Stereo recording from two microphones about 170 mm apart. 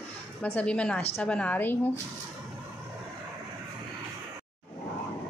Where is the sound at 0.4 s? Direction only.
10° left (ahead or behind).